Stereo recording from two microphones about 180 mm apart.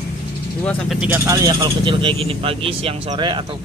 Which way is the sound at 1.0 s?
15° right (ahead or behind).